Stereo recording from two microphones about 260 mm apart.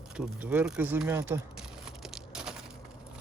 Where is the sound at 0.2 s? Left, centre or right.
Centre.